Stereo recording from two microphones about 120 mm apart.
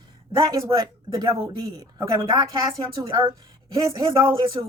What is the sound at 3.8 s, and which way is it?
Speech, 30° right (ahead or behind).